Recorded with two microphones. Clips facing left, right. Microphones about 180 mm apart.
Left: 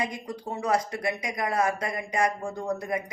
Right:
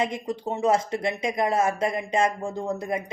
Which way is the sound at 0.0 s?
25° right (ahead or behind).